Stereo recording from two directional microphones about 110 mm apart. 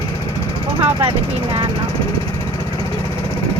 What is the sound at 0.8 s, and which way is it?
Speech, 50° right (ahead or behind).